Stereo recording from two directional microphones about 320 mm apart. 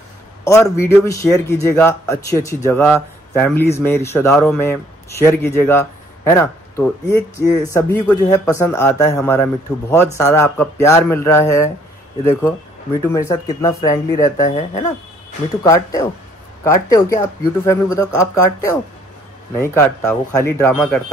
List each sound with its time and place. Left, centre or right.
0.5 s a man's voice: centre
13.0 s a man's voice: centre